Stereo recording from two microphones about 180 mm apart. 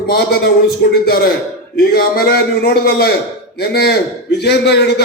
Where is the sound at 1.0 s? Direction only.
55° left (ahead or behind).